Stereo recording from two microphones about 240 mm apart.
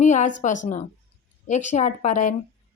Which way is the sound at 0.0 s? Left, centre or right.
Left.